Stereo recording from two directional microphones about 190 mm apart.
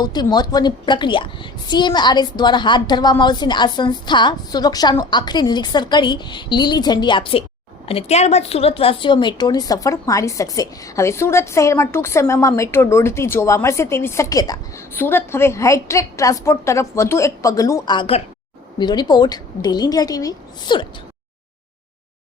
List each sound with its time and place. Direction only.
0.0 s a woman's voice: 20° left (ahead or behind)